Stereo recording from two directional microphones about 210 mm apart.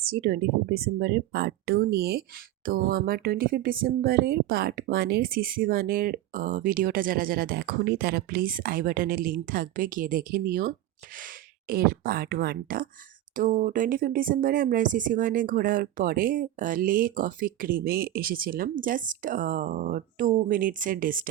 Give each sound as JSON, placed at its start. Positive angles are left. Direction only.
{"t": 0.0, "sound": "speech", "side_deg": -45}